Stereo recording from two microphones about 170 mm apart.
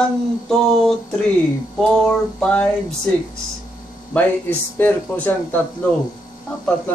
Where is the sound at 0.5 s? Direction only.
5° left (ahead or behind).